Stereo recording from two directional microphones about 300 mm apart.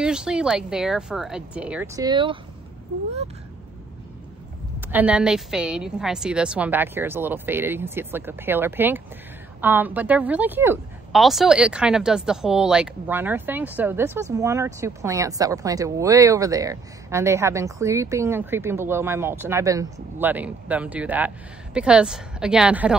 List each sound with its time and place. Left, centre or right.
0.0 s a woman's voice: centre
4.7 s a woman's voice: centre